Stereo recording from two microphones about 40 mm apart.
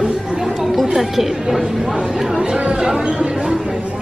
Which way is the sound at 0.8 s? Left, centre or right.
Centre.